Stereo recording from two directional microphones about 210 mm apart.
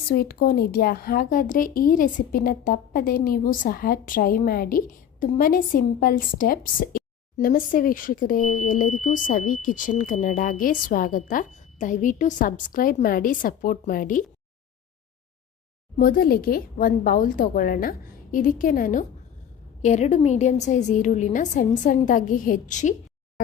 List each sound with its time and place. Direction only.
0.1 s speech: 45° left (ahead or behind)
16.0 s speech: 45° left (ahead or behind)